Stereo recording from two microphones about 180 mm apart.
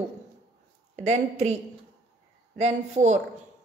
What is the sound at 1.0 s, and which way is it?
Speech, 40° right (ahead or behind).